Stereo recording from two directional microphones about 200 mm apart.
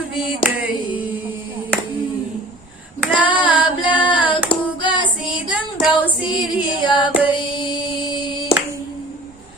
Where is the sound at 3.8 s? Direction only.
25° left (ahead or behind).